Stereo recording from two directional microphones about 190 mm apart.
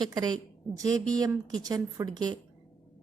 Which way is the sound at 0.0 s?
20° right (ahead or behind).